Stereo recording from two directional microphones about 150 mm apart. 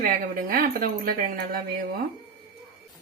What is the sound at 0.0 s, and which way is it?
A woman's voice, 70° right (ahead or behind).